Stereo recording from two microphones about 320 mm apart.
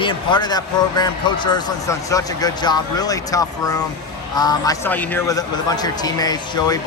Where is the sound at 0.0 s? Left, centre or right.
Centre.